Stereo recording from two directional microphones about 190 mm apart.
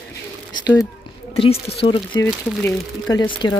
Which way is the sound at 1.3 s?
30° left (ahead or behind).